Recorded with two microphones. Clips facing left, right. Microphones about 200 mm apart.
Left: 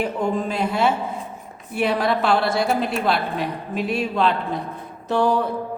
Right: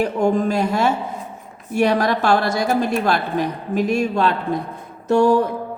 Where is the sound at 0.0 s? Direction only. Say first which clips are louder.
Right 5 dB; 45° right (ahead or behind).